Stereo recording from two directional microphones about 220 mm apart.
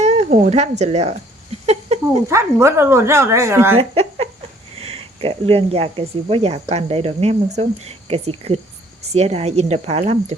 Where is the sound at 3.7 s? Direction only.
25° right (ahead or behind).